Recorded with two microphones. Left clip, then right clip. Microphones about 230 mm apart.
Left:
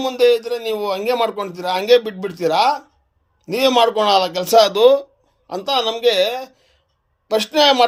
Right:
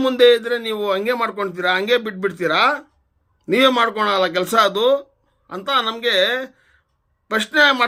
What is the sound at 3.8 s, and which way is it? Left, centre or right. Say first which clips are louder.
A man's voice: left 3 dB; left.